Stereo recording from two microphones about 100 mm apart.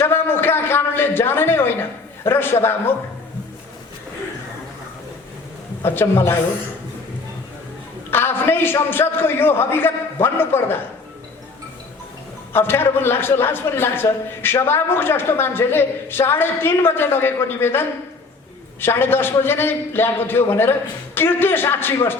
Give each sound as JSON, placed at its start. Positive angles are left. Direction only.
{"t": 0.0, "sound": "a man's voice", "side_deg": 20}
{"t": 5.8, "sound": "a man's voice", "side_deg": 20}
{"t": 8.1, "sound": "a man's voice", "side_deg": 20}
{"t": 12.5, "sound": "a man's voice", "side_deg": 20}